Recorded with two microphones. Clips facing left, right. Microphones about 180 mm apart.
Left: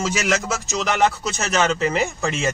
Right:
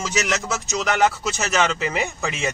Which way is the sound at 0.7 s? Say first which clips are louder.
Even; centre (ahead or behind).